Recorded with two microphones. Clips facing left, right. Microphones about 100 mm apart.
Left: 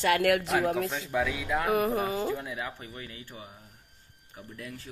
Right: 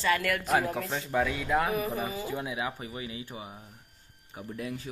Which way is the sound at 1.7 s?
75° left (ahead or behind).